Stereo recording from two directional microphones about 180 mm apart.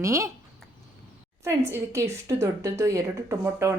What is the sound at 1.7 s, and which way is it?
A woman's voice, 15° right (ahead or behind).